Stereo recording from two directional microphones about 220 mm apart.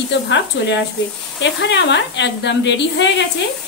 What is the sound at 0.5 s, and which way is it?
Speech, 55° left (ahead or behind).